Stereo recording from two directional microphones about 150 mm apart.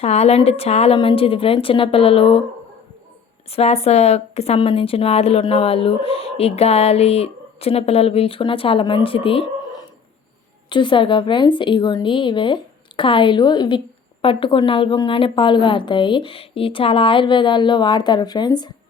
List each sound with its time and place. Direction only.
0.0 s a woman's voice: 45° left (ahead or behind)
3.5 s a woman's voice: 45° left (ahead or behind)
10.7 s a woman's voice: 30° left (ahead or behind)